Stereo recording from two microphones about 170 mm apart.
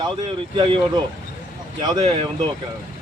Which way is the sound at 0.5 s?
30° right (ahead or behind).